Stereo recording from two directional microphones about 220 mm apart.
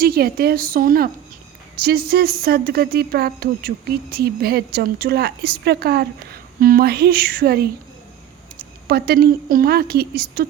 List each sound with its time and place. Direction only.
0.0 s a woman's voice: 45° right (ahead or behind)